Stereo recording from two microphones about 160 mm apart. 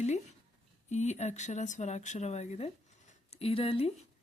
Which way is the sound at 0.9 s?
45° left (ahead or behind).